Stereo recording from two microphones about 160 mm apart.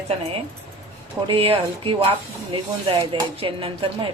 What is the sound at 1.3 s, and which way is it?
A woman's voice, 35° right (ahead or behind).